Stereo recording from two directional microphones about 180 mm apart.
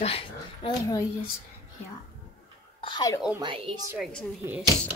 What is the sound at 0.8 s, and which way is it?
Speech, 20° left (ahead or behind).